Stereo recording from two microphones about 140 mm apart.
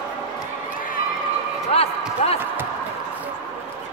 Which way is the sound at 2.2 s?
50° left (ahead or behind).